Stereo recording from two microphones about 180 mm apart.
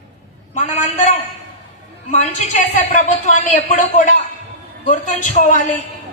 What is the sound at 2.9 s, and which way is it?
A man's voice, 40° left (ahead or behind).